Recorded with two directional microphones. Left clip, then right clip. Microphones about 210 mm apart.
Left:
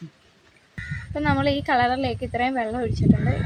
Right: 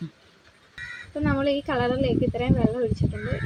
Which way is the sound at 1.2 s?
40° left (ahead or behind).